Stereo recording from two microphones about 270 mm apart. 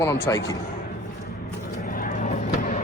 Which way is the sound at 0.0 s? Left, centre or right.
Centre.